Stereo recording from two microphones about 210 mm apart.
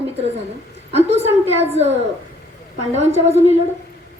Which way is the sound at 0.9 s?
30° right (ahead or behind).